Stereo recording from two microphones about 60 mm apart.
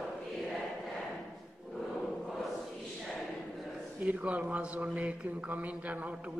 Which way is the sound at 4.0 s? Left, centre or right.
Right.